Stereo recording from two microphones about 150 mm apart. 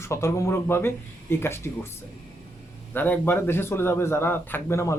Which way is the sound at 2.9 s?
10° left (ahead or behind).